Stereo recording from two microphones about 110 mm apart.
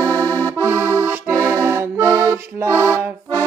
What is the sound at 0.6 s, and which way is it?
Accordion, 25° right (ahead or behind).